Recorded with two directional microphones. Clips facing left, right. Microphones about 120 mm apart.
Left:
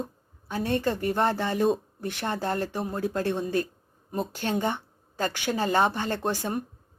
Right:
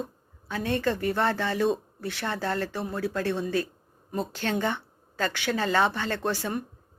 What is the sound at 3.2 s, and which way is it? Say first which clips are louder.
Speech: left 1 dB; 15° left (ahead or behind).